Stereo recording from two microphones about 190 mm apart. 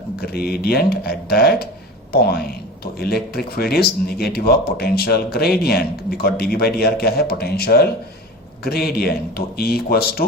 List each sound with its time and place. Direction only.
0.2 s speech: 55° left (ahead or behind)
2.8 s speech: 55° left (ahead or behind)